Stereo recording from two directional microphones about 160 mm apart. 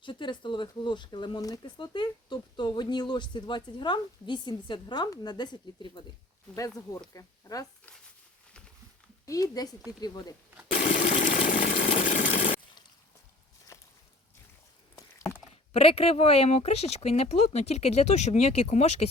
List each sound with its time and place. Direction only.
0.0 s speech: 30° left (ahead or behind)
7.1 s speech: 20° left (ahead or behind)
9.2 s speech: 20° left (ahead or behind)
10.8 s engine: 50° left (ahead or behind)
11.9 s a sound: 55° left (ahead or behind)
13.7 s walk: 20° left (ahead or behind)
14.9 s a sound: 20° left (ahead or behind)
15.7 s speech: 35° left (ahead or behind)